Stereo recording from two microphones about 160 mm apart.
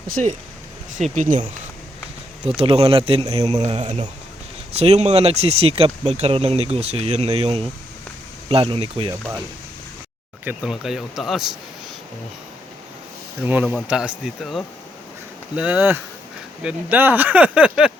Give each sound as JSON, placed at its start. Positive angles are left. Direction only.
{"t": 0.1, "sound": "speech", "side_deg": -50}
{"t": 2.6, "sound": "speech", "side_deg": -35}
{"t": 10.4, "sound": "speech", "side_deg": -5}
{"t": 13.4, "sound": "speech", "side_deg": -10}